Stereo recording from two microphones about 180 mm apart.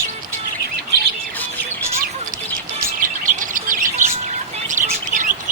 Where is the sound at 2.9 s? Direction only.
45° right (ahead or behind).